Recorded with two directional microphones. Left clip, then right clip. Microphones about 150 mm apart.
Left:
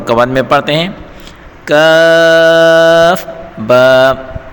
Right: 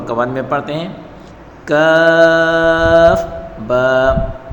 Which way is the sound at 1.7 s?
55° left (ahead or behind).